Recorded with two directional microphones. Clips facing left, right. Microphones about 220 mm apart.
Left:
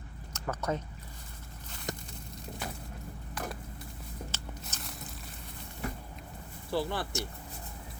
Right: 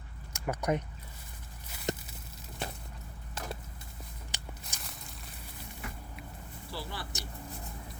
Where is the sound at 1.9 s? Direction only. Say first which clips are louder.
Right 5 dB; 25° right (ahead or behind).